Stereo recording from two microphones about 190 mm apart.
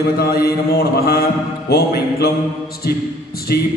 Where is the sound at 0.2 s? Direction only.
55° left (ahead or behind).